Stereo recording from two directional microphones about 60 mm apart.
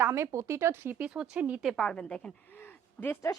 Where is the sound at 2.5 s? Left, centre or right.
Left.